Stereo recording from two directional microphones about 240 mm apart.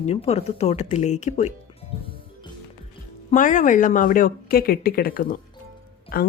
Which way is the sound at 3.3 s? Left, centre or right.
Left.